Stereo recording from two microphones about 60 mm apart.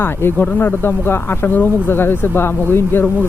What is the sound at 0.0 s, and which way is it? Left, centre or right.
Speech, left.